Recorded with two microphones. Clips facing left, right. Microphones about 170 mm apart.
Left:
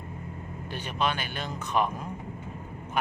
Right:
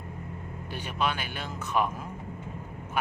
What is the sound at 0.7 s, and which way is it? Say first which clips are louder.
Speech: left 1 dB; 10° right (ahead or behind).